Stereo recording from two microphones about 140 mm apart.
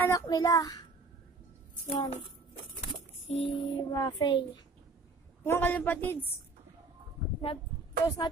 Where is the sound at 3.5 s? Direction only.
35° left (ahead or behind).